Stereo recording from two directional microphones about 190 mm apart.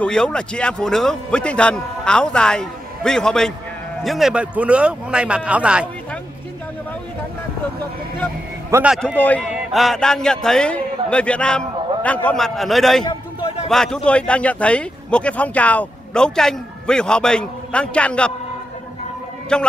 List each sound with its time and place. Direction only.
0.0 s a man's voice: 5° left (ahead or behind)
8.6 s a man's voice: 15° right (ahead or behind)
8.9 s a man's voice: 10° left (ahead or behind)
13.0 s a sound: 25° left (ahead or behind)
13.7 s a man's voice: centre (ahead or behind)
19.5 s a man's voice: 5° left (ahead or behind)